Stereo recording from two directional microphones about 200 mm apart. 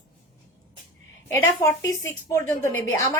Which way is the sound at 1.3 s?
15° left (ahead or behind).